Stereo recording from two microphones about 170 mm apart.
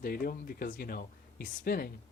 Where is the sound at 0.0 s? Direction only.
60° left (ahead or behind).